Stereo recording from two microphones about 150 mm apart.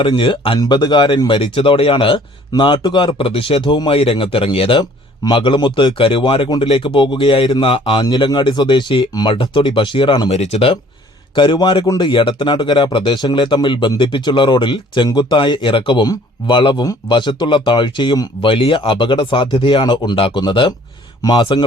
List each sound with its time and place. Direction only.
0.0 s speech: 35° left (ahead or behind)
10.2 s speech: 45° left (ahead or behind); by 21.6 s 25° left (ahead or behind)